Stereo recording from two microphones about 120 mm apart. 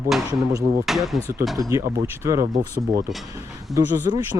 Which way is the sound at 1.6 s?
25° right (ahead or behind).